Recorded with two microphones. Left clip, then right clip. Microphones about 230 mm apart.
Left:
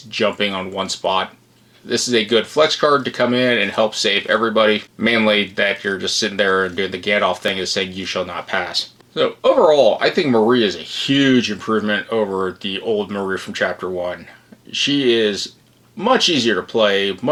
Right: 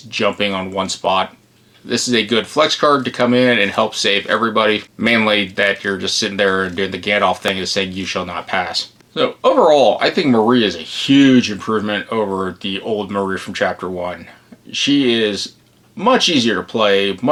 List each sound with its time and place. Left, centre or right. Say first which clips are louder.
0.1 s speech: right 1 dB; right